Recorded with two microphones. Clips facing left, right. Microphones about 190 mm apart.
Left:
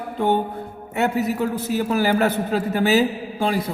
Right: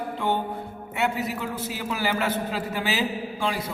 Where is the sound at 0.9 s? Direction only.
40° left (ahead or behind).